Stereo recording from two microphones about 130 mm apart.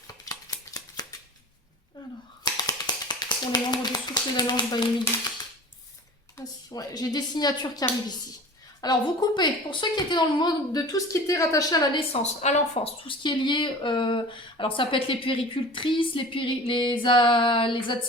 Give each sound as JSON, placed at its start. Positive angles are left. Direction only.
{"t": 0.3, "sound": "scissors", "side_deg": 30}
{"t": 2.4, "sound": "finger snapping", "side_deg": 30}
{"t": 6.3, "sound": "a woman's voice", "side_deg": 30}
{"t": 11.9, "sound": "speech", "side_deg": 50}